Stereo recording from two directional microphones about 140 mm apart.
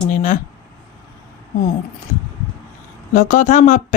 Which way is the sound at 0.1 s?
65° left (ahead or behind).